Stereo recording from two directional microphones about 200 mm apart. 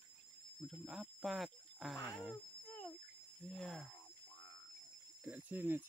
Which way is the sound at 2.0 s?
Centre (ahead or behind).